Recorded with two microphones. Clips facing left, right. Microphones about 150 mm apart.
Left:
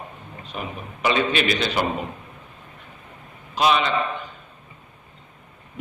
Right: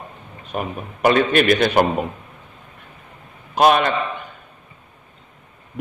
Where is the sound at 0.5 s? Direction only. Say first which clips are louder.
Right 6 dB; 50° right (ahead or behind).